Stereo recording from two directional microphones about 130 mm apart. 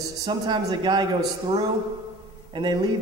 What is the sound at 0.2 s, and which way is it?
Speech, 30° right (ahead or behind).